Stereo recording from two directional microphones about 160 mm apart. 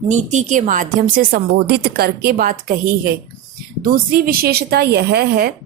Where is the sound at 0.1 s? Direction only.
50° right (ahead or behind); by 5.5 s 80° right.